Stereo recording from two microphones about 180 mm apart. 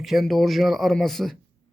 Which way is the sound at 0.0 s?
Centre (ahead or behind).